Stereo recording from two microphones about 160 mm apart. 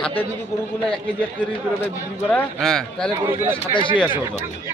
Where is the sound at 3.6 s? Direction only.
30° left (ahead or behind).